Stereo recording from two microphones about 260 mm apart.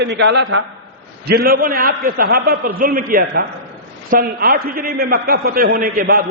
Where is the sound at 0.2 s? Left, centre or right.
Right.